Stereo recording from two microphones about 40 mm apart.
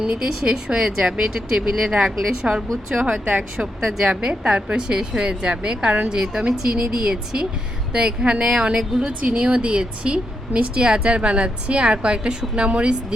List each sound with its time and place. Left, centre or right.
0.0 s a woman's voice: right
3.8 s a woman's voice: centre
4.0 s a woman's voice: right